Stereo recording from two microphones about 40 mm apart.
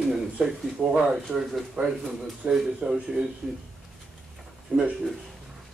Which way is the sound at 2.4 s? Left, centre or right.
Right.